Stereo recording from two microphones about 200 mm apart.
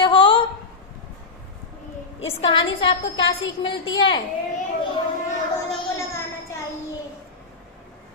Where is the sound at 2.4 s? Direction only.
25° left (ahead or behind).